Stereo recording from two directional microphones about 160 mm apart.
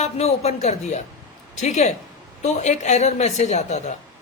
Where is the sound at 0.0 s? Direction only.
40° left (ahead or behind).